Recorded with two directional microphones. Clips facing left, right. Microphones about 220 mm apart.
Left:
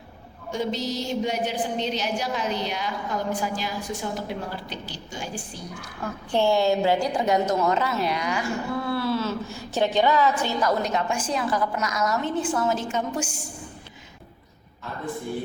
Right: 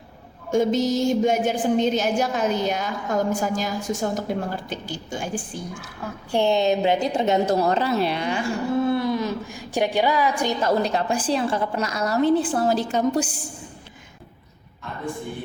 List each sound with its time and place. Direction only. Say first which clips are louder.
0.5 s a woman's voice: right 8 dB; 45° right (ahead or behind)
6.3 s a woman's voice: right 1 dB; 20° right (ahead or behind)
10.6 s a woman's voice: right 3 dB; 30° right (ahead or behind)